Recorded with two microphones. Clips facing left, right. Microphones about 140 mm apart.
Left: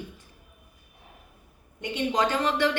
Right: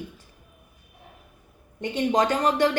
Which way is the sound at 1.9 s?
45° right (ahead or behind).